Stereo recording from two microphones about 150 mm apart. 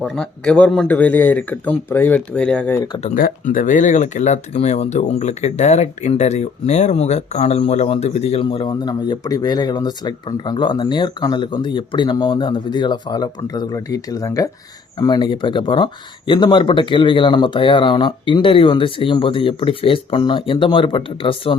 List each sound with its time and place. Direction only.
0.0 s speech: 5° left (ahead or behind)
2.7 s speech: 25° left (ahead or behind)
3.2 s speech: 65° left (ahead or behind); by 21.6 s 35° left (ahead or behind)